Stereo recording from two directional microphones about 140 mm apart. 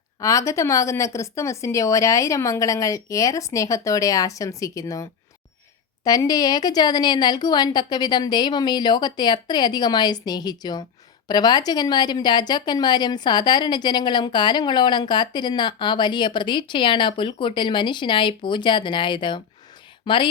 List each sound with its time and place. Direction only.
0.2 s a woman's voice: 25° left (ahead or behind)
6.1 s a woman's voice: 25° left (ahead or behind)